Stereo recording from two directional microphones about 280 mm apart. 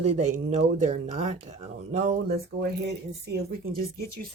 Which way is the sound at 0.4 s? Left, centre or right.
Right.